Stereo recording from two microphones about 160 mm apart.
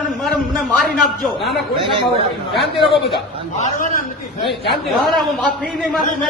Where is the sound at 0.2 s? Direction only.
Centre (ahead or behind).